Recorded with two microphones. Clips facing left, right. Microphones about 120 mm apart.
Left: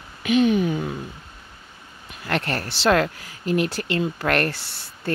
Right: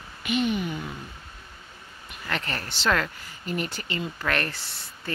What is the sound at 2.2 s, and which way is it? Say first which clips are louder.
Speech: left 6 dB; 60° left (ahead or behind).